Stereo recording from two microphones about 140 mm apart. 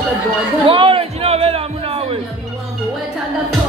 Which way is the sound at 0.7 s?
40° right (ahead or behind).